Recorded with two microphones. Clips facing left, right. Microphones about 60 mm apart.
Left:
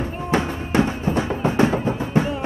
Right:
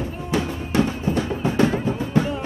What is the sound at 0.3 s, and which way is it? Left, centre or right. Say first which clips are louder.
Music: left 2 dB; left.